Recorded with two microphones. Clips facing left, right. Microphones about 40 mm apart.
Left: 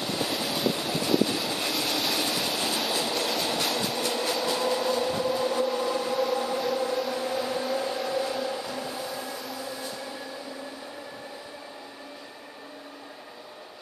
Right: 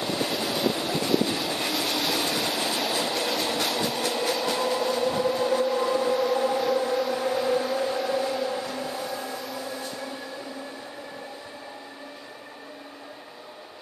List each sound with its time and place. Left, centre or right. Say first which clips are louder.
0.0 s train: right 2 dB; centre
5.8 s vehicle: right 3 dB; centre
6.6 s a sound: right 3 dB; centre
7.3 s vehicle: right 5 dB; centre